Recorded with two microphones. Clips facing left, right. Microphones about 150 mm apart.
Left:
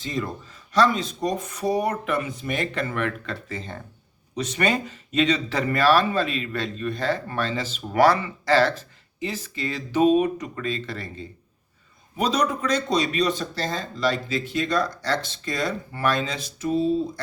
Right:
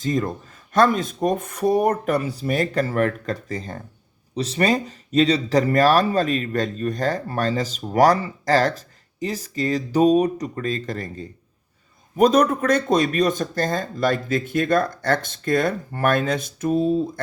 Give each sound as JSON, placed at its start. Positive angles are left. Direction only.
{"t": 0.0, "sound": "a man's voice", "side_deg": -45}